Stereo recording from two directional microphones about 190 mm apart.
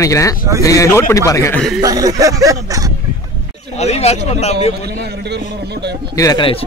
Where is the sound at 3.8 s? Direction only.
35° left (ahead or behind).